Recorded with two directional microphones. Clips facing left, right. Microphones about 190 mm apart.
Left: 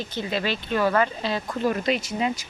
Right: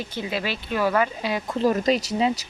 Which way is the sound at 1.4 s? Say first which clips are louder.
Right 4 dB; 35° right (ahead or behind).